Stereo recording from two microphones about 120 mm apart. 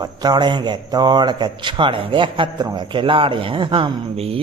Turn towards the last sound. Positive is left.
turn(degrees=-55)  # may be behind; listen again after turning